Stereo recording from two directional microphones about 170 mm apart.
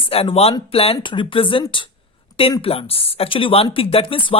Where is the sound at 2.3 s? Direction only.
20° left (ahead or behind).